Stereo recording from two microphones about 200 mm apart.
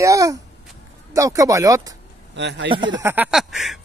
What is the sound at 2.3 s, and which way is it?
Speech, 60° right (ahead or behind).